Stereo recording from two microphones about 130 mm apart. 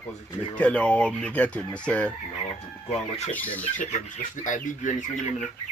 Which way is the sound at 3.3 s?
10° left (ahead or behind).